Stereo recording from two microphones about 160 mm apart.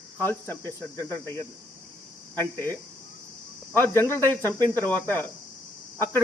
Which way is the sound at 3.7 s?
15° left (ahead or behind).